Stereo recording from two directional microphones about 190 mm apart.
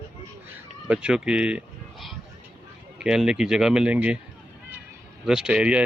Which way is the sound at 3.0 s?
5° right (ahead or behind).